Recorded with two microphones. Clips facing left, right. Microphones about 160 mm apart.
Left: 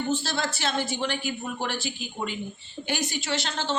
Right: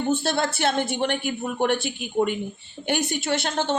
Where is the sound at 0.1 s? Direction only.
55° right (ahead or behind).